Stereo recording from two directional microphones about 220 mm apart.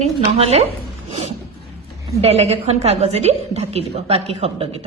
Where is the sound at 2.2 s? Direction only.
30° right (ahead or behind).